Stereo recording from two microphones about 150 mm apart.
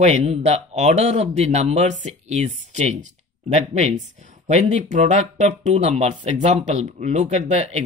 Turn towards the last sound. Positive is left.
turn(degrees=-45)  # may be behind; listen again after turning